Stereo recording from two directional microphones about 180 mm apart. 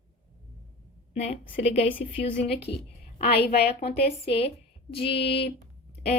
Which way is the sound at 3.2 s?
60° left (ahead or behind).